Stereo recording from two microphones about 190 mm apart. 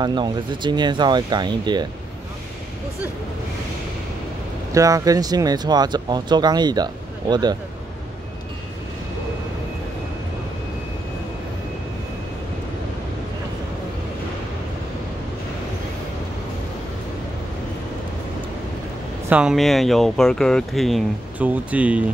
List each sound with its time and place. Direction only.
0.0 s speech: 25° right (ahead or behind)
4.7 s speech: 15° right (ahead or behind)
19.2 s speech: 5° right (ahead or behind)